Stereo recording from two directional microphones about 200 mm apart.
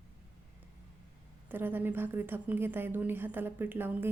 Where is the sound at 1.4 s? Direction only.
10° right (ahead or behind).